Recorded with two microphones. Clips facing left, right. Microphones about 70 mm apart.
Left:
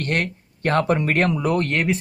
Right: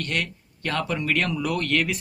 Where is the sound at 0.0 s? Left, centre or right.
Left.